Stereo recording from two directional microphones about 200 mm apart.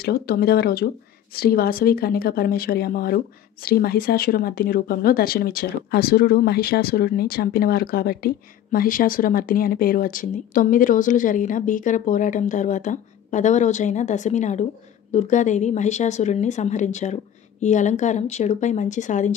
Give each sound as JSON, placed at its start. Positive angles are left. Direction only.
{"t": 0.0, "sound": "a woman's voice", "side_deg": 50}